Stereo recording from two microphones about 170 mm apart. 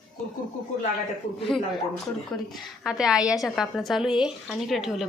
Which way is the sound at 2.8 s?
5° right (ahead or behind).